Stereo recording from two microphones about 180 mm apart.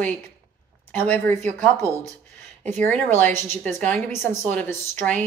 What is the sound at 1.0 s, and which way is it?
Speech, 10° left (ahead or behind).